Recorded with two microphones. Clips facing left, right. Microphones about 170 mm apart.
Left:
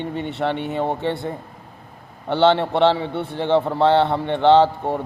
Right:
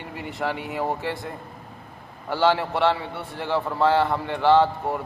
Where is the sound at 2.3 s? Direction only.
25° left (ahead or behind).